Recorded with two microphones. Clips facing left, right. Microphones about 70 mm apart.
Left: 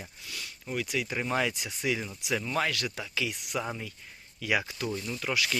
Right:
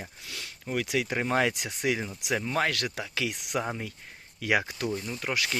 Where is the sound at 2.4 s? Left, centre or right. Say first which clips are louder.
Right 2 dB; right.